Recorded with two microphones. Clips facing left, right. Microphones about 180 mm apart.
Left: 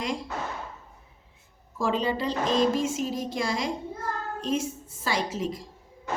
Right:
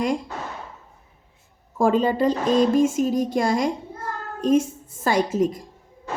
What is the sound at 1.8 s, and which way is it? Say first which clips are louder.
A woman's voice: right 8 dB; 50° right (ahead or behind).